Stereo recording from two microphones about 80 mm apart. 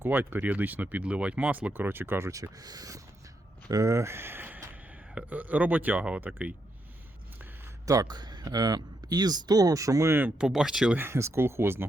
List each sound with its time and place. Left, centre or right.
0.0 s speech: right
7.9 s speech: right
10.3 s speech: centre
10.9 s speech: right